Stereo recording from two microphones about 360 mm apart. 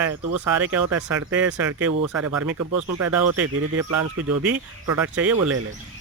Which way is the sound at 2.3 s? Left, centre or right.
Right.